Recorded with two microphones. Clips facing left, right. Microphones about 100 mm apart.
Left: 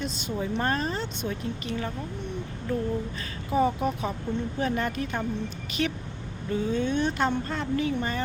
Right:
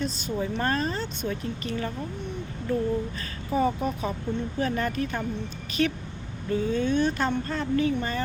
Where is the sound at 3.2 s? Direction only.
20° left (ahead or behind).